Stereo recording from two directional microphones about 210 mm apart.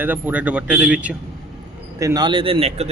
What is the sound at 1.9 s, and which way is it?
Speech, 15° right (ahead or behind).